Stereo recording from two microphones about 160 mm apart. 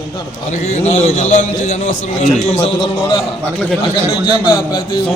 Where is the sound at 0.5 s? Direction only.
45° left (ahead or behind).